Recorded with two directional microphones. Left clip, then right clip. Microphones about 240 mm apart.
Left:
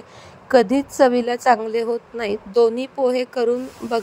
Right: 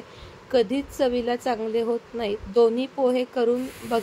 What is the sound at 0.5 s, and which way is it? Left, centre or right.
A woman's voice, left.